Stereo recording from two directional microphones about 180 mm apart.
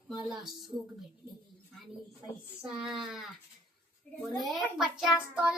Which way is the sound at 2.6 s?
5° right (ahead or behind).